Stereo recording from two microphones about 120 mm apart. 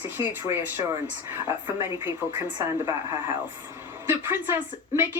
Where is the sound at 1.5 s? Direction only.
20° right (ahead or behind).